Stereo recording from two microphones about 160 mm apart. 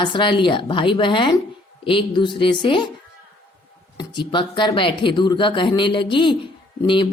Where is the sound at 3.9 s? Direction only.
30° left (ahead or behind).